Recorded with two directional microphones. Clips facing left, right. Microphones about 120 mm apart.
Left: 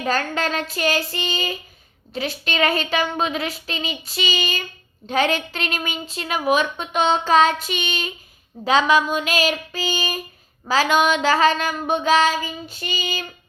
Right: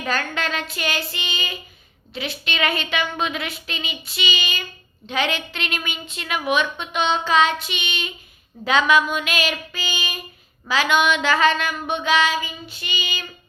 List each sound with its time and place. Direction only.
0.0 s a woman's voice: 35° left (ahead or behind)